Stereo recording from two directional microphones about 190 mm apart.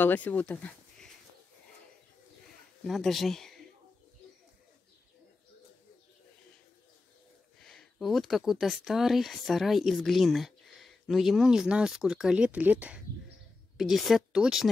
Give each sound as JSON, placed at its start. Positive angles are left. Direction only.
{"t": 0.0, "sound": "speech", "side_deg": 10}
{"t": 2.8, "sound": "speech", "side_deg": 0}
{"t": 7.6, "sound": "speech", "side_deg": 0}